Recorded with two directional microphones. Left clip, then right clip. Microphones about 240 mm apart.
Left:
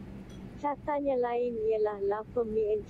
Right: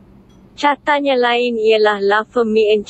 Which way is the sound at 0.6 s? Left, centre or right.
Right.